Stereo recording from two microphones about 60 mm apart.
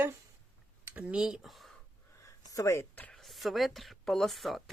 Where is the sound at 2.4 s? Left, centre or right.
Left.